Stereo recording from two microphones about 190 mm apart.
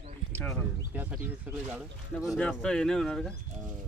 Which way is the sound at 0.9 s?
10° right (ahead or behind).